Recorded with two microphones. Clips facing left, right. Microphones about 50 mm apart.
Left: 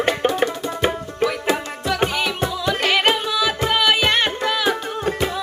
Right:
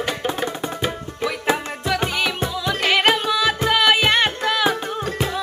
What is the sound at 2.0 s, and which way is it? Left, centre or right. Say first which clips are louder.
Music: left 1 dB; centre.